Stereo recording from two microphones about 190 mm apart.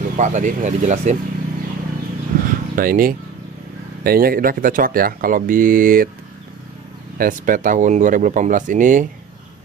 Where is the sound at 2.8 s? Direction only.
50° right (ahead or behind).